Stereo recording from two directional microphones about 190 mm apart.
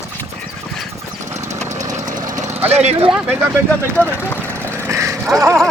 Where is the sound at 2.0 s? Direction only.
40° right (ahead or behind).